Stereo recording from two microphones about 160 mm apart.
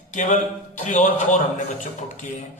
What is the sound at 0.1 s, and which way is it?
A man's voice, 50° left (ahead or behind).